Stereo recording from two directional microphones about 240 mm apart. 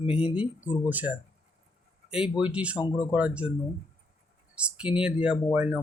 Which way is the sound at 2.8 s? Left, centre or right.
Centre.